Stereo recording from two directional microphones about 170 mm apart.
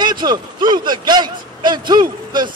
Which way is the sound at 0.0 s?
25° right (ahead or behind).